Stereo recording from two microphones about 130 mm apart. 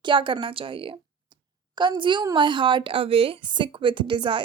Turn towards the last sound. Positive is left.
turn(degrees=-40)  # may be behind; listen again after turning